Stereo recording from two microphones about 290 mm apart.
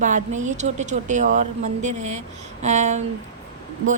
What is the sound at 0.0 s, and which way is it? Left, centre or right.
Speech, right.